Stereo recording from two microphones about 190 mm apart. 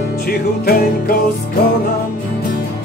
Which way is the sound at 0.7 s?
50° left (ahead or behind).